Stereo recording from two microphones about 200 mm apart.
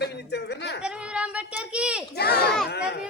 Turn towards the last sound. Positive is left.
turn(degrees=55)  # may be behind; listen again after turning